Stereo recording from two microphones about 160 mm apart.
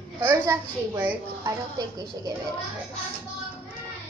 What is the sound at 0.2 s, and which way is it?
A child's voice, 15° right (ahead or behind).